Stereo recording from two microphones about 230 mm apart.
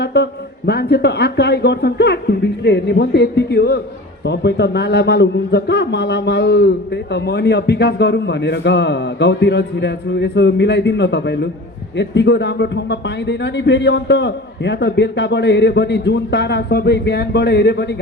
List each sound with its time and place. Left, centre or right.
0.0 s a man's voice: left